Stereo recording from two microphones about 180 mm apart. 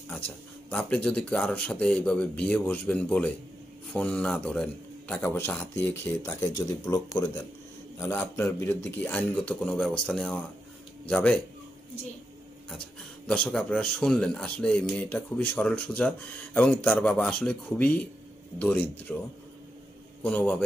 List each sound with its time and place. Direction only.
0.7 s speech: 5° left (ahead or behind)
13.3 s speech: 5° left (ahead or behind)
20.2 s speech: 5° left (ahead or behind)